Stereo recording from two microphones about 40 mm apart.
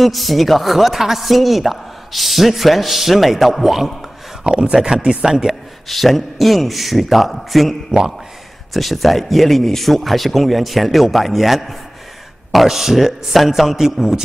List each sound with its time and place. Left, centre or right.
0.0 s a woman's voice: centre
4.5 s a man's voice: right
5.9 s a woman's voice: centre
8.7 s a woman's voice: centre